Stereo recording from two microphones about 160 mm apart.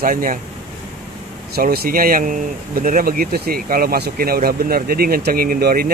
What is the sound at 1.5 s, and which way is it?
Speech, 70° right (ahead or behind).